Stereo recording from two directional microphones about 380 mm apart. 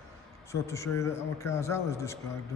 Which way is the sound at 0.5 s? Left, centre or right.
Centre.